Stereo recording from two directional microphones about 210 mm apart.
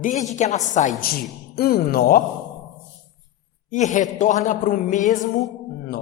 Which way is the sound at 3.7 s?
35° left (ahead or behind).